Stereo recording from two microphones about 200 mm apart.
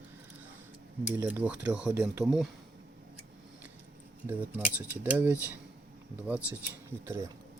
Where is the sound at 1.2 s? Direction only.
5° right (ahead or behind).